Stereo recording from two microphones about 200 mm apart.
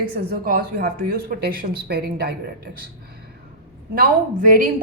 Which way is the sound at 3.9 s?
45° right (ahead or behind).